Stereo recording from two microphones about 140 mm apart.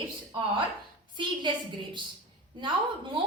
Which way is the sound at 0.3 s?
30° right (ahead or behind).